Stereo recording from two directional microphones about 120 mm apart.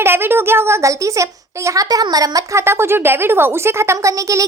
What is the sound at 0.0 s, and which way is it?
A woman's voice, 20° right (ahead or behind).